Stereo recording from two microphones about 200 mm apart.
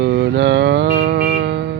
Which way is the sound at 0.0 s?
60° right (ahead or behind).